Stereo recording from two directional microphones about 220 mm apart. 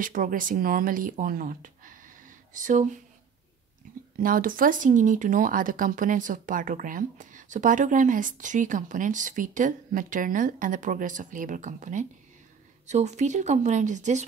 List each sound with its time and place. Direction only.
0.0 s speech: 40° right (ahead or behind)
4.2 s speech: 40° right (ahead or behind)